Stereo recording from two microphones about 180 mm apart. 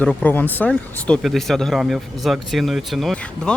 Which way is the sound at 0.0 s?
5° left (ahead or behind).